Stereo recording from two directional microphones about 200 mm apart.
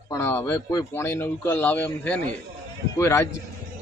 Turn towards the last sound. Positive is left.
turn(degrees=15)  # may be behind; listen again after turning